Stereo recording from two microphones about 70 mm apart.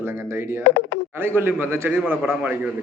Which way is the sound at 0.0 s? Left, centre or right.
Right.